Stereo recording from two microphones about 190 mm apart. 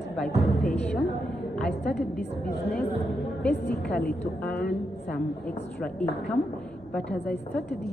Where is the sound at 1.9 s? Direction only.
Centre (ahead or behind).